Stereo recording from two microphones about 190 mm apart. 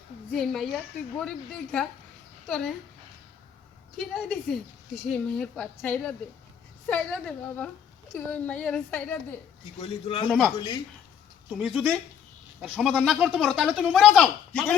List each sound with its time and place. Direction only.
0.3 s speech: centre (ahead or behind)
3.9 s a woman's voice: centre (ahead or behind)
9.8 s a man's voice: 30° left (ahead or behind)
10.2 s speech: centre (ahead or behind)
11.5 s speech: centre (ahead or behind)